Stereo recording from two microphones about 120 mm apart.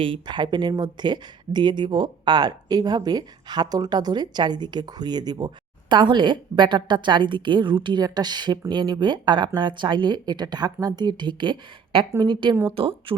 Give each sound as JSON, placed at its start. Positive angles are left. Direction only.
{"t": 0.0, "sound": "speech", "side_deg": -40}